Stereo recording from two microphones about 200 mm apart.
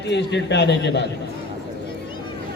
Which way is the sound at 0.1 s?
60° left (ahead or behind).